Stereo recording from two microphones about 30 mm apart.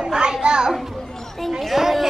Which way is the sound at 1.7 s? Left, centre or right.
Centre.